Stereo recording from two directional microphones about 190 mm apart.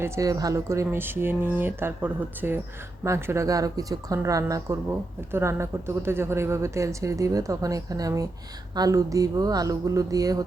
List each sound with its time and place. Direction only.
0.0 s speech: 20° right (ahead or behind)